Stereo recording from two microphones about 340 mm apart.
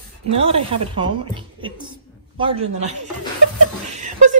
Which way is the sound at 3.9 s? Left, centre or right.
Right.